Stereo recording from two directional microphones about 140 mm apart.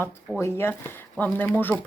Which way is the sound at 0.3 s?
15° left (ahead or behind).